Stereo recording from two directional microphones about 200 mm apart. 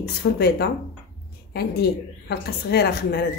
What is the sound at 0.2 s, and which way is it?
Speech, 55° left (ahead or behind).